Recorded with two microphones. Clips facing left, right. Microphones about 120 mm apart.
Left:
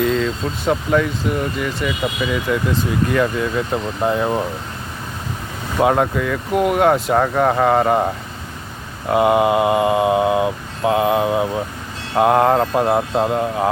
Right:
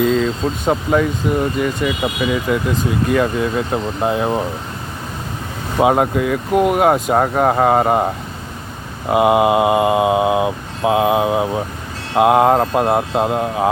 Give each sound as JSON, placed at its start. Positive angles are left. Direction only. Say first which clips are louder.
{"t": 0.0, "sound": "speech", "louder": "right 3 dB", "side_deg": -15}
{"t": 5.8, "sound": "speech", "louder": "right 2 dB", "side_deg": -20}